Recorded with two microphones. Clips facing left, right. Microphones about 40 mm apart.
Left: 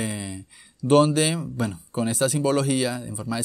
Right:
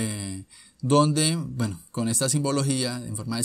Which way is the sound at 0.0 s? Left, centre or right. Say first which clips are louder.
Left 1 dB; left.